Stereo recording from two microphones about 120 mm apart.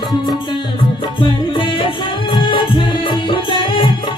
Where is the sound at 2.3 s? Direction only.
40° left (ahead or behind).